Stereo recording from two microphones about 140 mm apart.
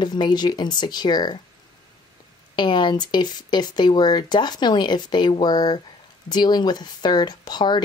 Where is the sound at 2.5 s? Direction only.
35° left (ahead or behind).